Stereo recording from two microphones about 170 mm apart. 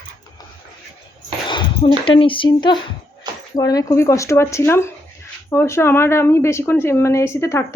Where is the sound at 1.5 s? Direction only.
30° left (ahead or behind).